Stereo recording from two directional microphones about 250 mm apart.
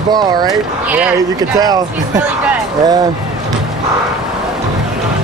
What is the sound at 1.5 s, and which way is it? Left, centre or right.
Speech, centre.